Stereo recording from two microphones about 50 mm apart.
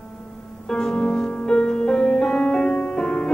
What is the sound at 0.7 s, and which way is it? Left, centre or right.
Music, centre.